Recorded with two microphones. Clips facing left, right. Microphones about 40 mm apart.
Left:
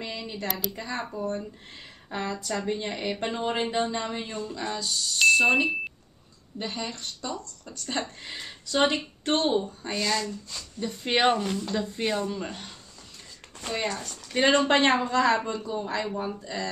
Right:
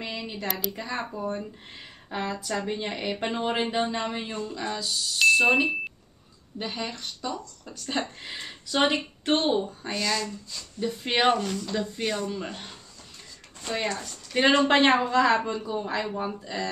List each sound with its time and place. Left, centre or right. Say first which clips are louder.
0.0 s speech: right 1 dB; centre
4.5 s speech: even; centre
9.9 s speech: left 1 dB; centre
11.9 s speech: left 1 dB; centre
12.3 s speech: even; centre
13.9 s speech: right 1 dB; centre